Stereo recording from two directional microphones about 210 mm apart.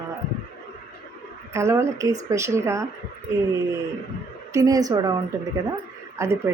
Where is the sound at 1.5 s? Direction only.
15° right (ahead or behind).